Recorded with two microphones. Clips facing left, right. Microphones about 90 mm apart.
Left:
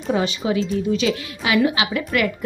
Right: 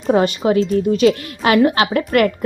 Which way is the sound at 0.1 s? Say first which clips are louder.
Right 6 dB; 45° right (ahead or behind).